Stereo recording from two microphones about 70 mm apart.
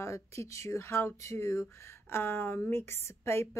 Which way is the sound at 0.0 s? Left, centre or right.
Left.